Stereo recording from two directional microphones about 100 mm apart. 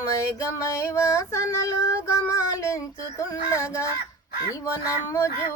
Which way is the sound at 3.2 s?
30° left (ahead or behind).